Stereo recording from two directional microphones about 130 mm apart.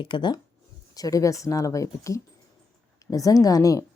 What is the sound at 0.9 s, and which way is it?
Speech, 25° left (ahead or behind).